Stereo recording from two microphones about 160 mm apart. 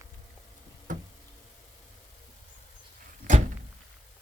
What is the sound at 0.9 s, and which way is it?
Knock, 50° right (ahead or behind).